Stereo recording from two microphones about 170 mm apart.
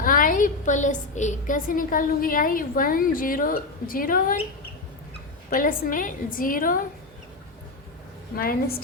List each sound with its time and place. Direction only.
0.0 s a woman's voice: 50° left (ahead or behind)
5.5 s a woman's voice: 55° left (ahead or behind)
8.4 s a woman's voice: 60° left (ahead or behind)